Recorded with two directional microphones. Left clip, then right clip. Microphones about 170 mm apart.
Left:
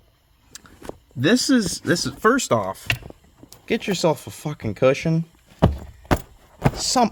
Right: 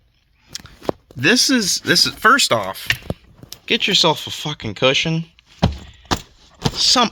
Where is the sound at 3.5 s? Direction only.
5° left (ahead or behind).